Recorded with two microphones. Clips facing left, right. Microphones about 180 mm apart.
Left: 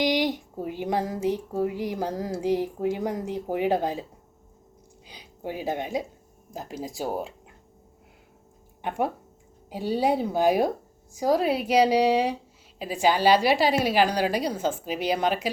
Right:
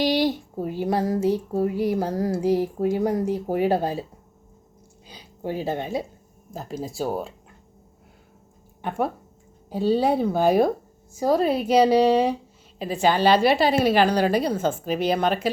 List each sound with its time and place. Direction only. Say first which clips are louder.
0.0 s a sound: right 3 dB; 15° left (ahead or behind)
0.6 s a woman's voice: right 4 dB; 15° left (ahead or behind)
5.0 s a woman's voice: right 4 dB; 15° left (ahead or behind)
8.8 s a woman's voice: right 1 dB; 15° left (ahead or behind)